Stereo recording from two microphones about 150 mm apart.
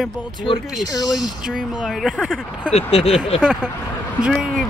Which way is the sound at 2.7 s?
40° left (ahead or behind).